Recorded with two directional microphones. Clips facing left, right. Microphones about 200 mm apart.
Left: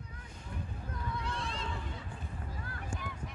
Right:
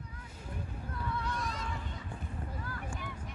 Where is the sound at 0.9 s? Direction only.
30° left (ahead or behind).